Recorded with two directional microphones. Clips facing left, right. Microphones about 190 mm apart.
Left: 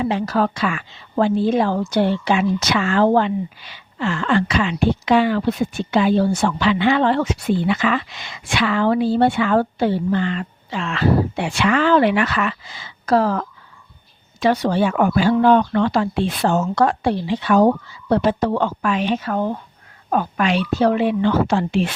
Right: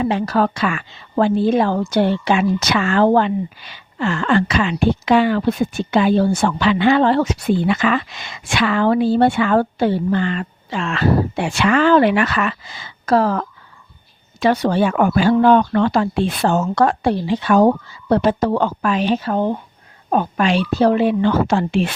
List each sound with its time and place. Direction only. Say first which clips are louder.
0.0 s a woman's voice: right 2 dB; 60° right (ahead or behind)